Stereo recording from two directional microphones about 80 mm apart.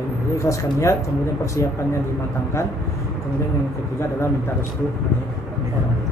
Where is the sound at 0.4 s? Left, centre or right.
Left.